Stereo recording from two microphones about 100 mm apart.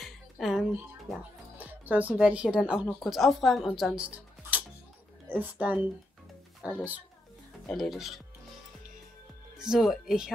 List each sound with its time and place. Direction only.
0.0 s music: centre (ahead or behind)
1.6 s speech: 15° right (ahead or behind)
3.0 s speech: centre (ahead or behind); by 6.8 s 15° right (ahead or behind)
7.7 s speech: centre (ahead or behind)
9.6 s speech: 5° right (ahead or behind)